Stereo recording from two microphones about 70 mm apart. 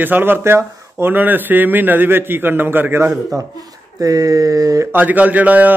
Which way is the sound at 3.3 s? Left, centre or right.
Right.